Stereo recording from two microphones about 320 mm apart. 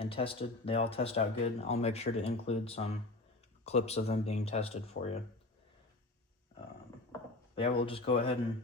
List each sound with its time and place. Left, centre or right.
0.0 s speech: centre
7.5 s speech: centre